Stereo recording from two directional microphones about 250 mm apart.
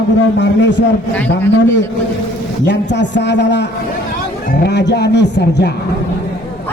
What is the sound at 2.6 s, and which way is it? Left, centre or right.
Speech, left.